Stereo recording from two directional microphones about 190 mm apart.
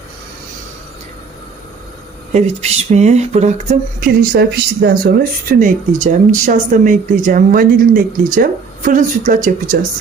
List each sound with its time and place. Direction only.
2.3 s speech: 35° right (ahead or behind)